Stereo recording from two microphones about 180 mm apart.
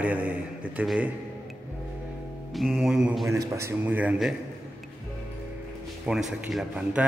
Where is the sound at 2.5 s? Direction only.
Centre (ahead or behind).